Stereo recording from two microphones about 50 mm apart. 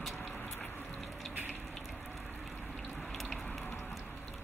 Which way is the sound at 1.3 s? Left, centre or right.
Right.